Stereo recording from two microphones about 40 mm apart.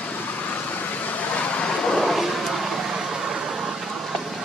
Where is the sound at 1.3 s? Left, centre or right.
Left.